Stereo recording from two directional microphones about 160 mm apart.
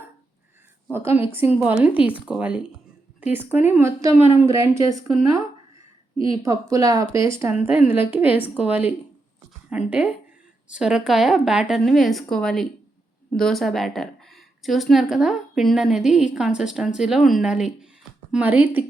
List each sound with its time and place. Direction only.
0.9 s a woman's voice: 15° right (ahead or behind)
6.1 s a woman's voice: 30° left (ahead or behind)
6.4 s a woman's voice: 20° right (ahead or behind)